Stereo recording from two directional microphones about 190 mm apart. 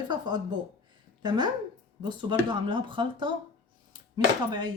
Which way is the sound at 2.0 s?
25° right (ahead or behind).